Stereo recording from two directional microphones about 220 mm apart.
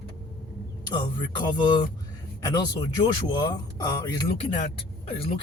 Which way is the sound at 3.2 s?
20° left (ahead or behind).